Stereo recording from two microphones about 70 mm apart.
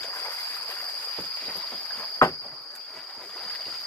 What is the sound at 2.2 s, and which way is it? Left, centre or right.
Cricket, left.